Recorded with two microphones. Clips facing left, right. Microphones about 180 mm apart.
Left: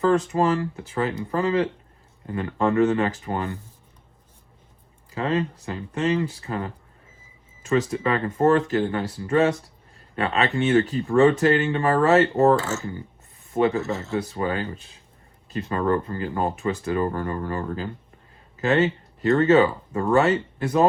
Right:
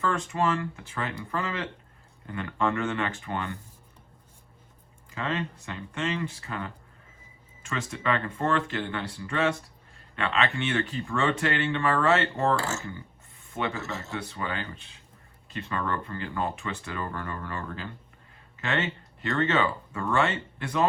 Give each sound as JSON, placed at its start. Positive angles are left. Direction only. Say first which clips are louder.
{"t": 0.0, "sound": "speech", "louder": "left 7 dB", "side_deg": 35}
{"t": 5.1, "sound": "speech", "louder": "left 7 dB", "side_deg": 35}